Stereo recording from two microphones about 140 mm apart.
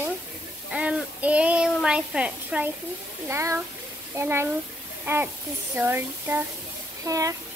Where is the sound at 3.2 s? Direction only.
20° right (ahead or behind).